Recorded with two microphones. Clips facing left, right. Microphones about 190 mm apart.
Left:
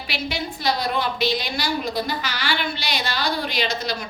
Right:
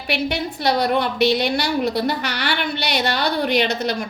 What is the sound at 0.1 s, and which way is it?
A woman's voice, 65° right (ahead or behind).